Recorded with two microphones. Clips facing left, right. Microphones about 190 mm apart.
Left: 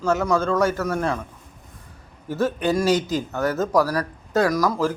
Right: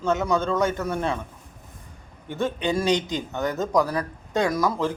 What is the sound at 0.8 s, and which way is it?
Speech, 25° right (ahead or behind).